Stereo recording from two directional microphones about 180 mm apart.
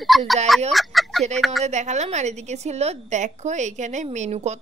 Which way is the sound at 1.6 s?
40° right (ahead or behind).